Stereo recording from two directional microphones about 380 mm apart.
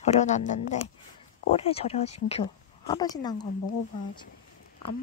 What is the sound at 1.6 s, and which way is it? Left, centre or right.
Speech, centre.